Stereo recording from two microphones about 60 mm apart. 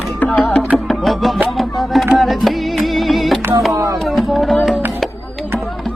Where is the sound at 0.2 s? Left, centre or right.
Left.